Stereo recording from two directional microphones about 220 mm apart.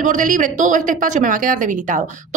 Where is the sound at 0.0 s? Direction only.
35° right (ahead or behind).